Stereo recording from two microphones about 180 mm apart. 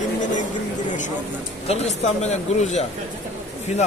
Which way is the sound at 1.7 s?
40° left (ahead or behind).